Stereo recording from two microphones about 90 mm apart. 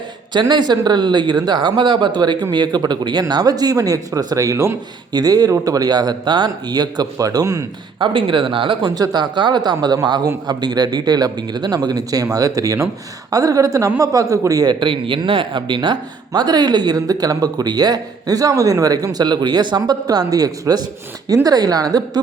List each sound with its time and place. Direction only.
0.3 s speech: 55° right (ahead or behind); by 4.8 s 30° right (ahead or behind)
5.1 s speech: 45° right (ahead or behind)
7.9 s speech: 65° right (ahead or behind)
9.0 s a man's voice: 55° right (ahead or behind); by 14.7 s 40° right (ahead or behind)
14.7 s speech: 65° right (ahead or behind); by 22.2 s 45° right (ahead or behind)